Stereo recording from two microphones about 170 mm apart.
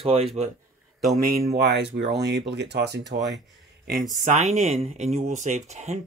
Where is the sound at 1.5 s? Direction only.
85° right.